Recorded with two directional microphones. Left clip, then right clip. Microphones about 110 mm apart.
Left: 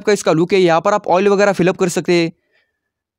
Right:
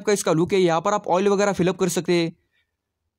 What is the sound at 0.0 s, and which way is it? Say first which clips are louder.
Speech: left 6 dB; 35° left (ahead or behind).